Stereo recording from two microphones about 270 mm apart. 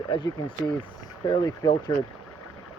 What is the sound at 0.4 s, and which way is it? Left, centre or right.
Speech, centre.